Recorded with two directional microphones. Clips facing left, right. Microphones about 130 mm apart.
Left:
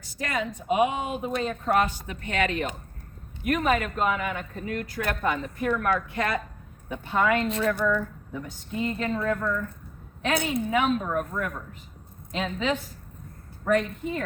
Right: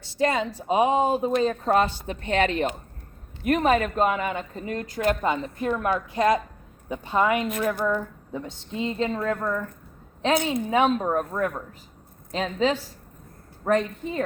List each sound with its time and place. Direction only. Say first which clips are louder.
0.0 s a woman's voice: right 6 dB; 30° right (ahead or behind)